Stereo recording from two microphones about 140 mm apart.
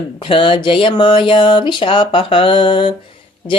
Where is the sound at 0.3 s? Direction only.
35° left (ahead or behind).